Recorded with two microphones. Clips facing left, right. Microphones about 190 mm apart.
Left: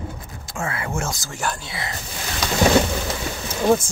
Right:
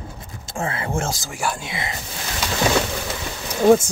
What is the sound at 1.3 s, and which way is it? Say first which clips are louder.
Speech: right 2 dB; 10° right (ahead or behind).